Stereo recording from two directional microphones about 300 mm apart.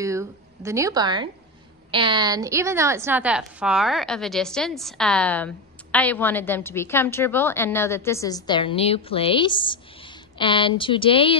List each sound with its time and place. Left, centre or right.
0.0 s a woman's voice: centre